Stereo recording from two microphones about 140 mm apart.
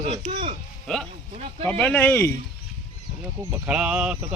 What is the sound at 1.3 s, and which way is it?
Speech, 50° right (ahead or behind).